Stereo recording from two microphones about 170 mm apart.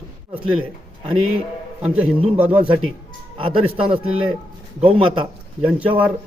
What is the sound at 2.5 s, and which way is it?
A man's voice, 35° right (ahead or behind).